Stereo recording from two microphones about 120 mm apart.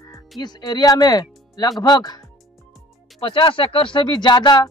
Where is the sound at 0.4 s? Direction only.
35° left (ahead or behind).